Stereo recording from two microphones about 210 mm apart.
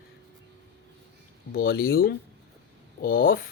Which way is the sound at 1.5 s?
45° left (ahead or behind).